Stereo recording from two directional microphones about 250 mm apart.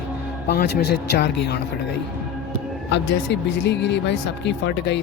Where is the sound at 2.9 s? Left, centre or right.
Left.